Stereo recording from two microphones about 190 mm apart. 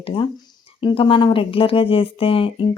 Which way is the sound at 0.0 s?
30° left (ahead or behind).